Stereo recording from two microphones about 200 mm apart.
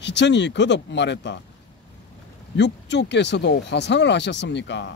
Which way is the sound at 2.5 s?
60° left (ahead or behind).